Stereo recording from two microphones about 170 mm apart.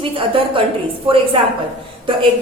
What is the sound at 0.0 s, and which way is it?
A woman's voice, 30° right (ahead or behind).